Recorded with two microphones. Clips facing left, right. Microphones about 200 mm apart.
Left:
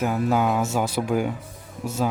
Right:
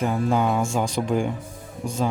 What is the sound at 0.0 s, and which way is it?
A man's voice, 5° left (ahead or behind).